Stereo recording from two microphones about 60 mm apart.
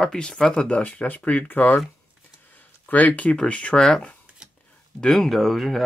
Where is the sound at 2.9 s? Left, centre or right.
Left; by 5.8 s centre.